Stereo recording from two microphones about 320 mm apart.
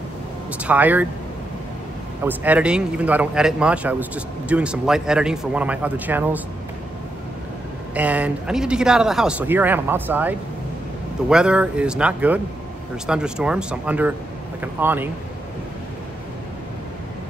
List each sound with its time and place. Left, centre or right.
0.5 s speech: centre
2.2 s speech: centre
7.9 s speech: centre